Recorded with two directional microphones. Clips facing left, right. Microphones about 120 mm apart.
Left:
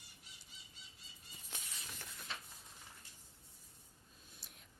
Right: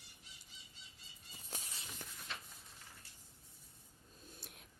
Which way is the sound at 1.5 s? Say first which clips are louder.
Right 2 dB; 40° right (ahead or behind).